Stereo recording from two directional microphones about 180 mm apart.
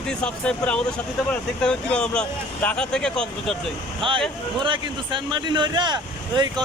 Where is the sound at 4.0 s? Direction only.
30° right (ahead or behind).